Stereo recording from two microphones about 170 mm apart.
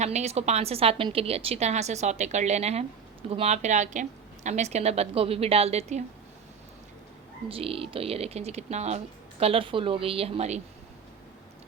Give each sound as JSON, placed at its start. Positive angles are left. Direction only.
{"t": 0.0, "sound": "a woman's voice", "side_deg": -40}
{"t": 7.4, "sound": "a woman's voice", "side_deg": -35}